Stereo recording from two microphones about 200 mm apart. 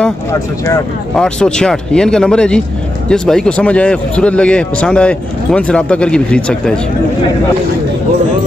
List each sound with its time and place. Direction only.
0.0 s a man's voice: 15° left (ahead or behind)